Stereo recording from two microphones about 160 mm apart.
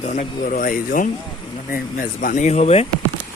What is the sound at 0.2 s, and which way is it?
Speech, 55° left (ahead or behind).